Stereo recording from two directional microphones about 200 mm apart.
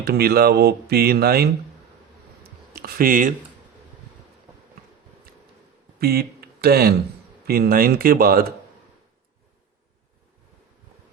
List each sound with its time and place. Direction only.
0.0 s speech: 50° right (ahead or behind)
2.8 s speech: 45° right (ahead or behind)
6.0 s speech: 50° right (ahead or behind)